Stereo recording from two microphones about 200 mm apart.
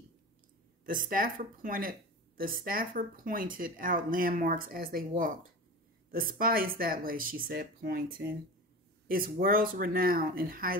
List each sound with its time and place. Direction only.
0.8 s speech: 45° right (ahead or behind)